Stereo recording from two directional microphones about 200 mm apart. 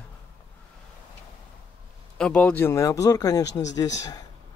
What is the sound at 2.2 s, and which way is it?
Speech, 5° left (ahead or behind).